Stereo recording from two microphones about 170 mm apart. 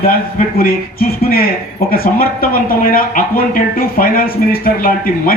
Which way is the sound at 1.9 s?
60° left (ahead or behind).